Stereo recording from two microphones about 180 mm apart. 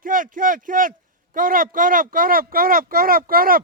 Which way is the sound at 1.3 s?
50° right (ahead or behind).